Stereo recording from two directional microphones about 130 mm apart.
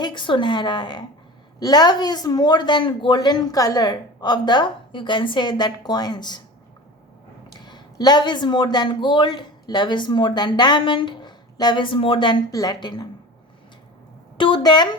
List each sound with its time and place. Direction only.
0.0 s speech: 40° left (ahead or behind)
7.6 s speech: 35° left (ahead or behind)
14.3 s a woman's voice: 40° left (ahead or behind)